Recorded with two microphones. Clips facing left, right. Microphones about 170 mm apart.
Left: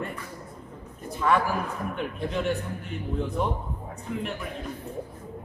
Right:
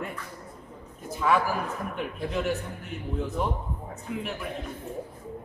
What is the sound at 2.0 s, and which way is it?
A man's voice, 5° right (ahead or behind).